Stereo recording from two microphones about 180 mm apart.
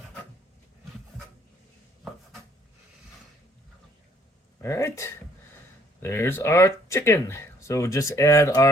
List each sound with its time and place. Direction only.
4.6 s speech: 15° left (ahead or behind)